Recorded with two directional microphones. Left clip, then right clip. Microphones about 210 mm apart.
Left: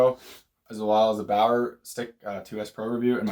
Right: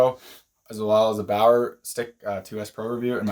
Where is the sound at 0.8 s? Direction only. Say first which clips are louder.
Right 2 dB; 50° right (ahead or behind).